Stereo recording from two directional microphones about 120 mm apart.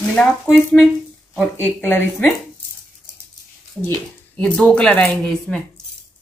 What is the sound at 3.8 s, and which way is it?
Speech, 15° left (ahead or behind).